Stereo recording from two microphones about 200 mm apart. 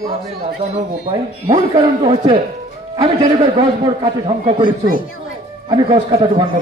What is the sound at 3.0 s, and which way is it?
A man's voice, 30° right (ahead or behind).